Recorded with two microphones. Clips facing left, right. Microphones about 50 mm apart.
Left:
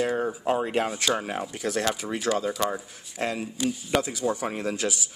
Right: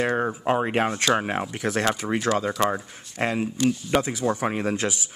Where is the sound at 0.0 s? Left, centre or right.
Right.